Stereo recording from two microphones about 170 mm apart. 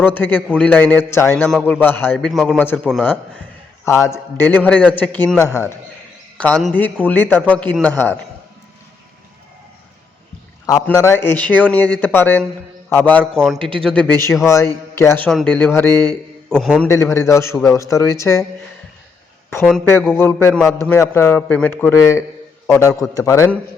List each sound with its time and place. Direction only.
0.0 s a man's voice: 10° left (ahead or behind)
10.8 s a man's voice: 15° left (ahead or behind)
13.6 s a man's voice: 30° right (ahead or behind)
13.8 s a man's voice: 5° left (ahead or behind)
15.9 s a man's voice: 20° right (ahead or behind)
16.5 s a man's voice: centre (ahead or behind)
16.8 s a man's voice: 15° left (ahead or behind)
19.5 s a man's voice: 15° left (ahead or behind)